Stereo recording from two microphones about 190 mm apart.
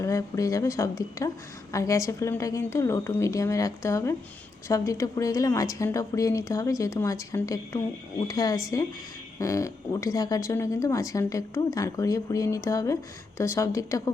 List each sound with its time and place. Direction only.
0.0 s speech: 15° left (ahead or behind)